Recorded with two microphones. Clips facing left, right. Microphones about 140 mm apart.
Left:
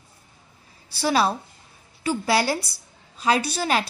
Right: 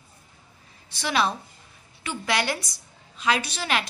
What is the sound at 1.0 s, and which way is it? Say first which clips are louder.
A woman's voice: left 4 dB; 35° left (ahead or behind).